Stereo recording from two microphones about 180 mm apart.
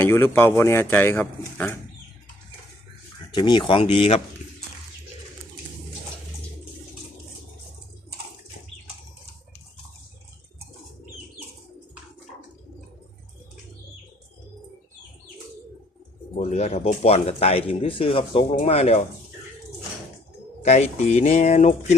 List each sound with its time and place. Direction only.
0.0 s speech: 15° left (ahead or behind)
3.3 s speech: 25° left (ahead or behind)
16.4 s speech: 35° left (ahead or behind)
20.6 s speech: 40° left (ahead or behind)